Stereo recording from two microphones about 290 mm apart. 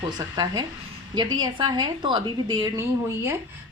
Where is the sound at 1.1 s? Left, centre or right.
Centre.